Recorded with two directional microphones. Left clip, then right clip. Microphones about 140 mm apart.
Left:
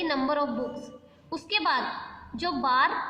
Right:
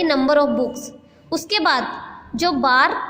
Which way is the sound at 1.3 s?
35° right (ahead or behind).